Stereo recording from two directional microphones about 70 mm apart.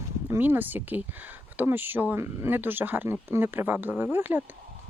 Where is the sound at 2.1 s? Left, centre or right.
Right.